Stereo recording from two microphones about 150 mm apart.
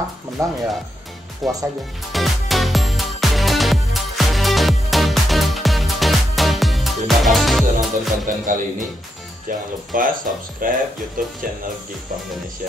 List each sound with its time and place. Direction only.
0.4 s speech: 20° right (ahead or behind)
1.4 s speech: centre (ahead or behind)
2.1 s music: centre (ahead or behind)
8.3 s speech: 60° right (ahead or behind)